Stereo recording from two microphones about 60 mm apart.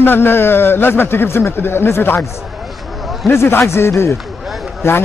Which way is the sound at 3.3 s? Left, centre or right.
Left.